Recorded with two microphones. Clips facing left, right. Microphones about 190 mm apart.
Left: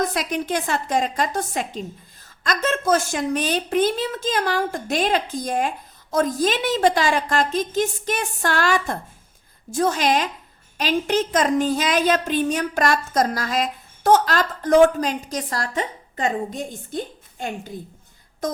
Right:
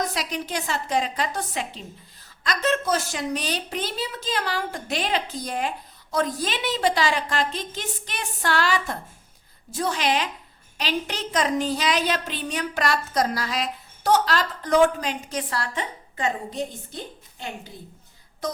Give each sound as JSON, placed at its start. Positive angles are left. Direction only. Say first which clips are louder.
{"t": 0.0, "sound": "a woman's voice", "louder": "left 5 dB", "side_deg": 50}